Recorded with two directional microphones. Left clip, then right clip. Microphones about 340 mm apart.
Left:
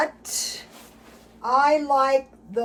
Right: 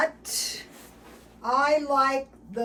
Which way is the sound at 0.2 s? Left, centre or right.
Centre.